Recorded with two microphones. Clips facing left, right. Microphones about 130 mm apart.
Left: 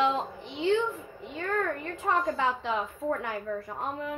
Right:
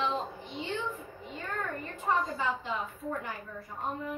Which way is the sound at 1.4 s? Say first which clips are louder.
Left 7 dB; 80° left.